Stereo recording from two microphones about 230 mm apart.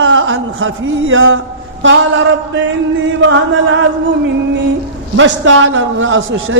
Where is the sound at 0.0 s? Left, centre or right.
Right.